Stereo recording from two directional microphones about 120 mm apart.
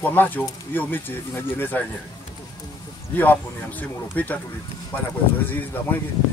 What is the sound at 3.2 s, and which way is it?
Speech, 15° left (ahead or behind).